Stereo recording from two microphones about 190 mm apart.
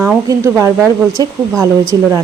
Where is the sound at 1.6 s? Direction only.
15° right (ahead or behind).